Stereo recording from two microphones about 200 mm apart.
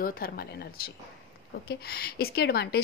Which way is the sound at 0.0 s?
45° left (ahead or behind).